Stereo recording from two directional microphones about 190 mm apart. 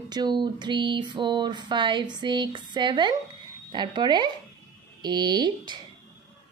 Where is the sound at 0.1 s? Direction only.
25° right (ahead or behind).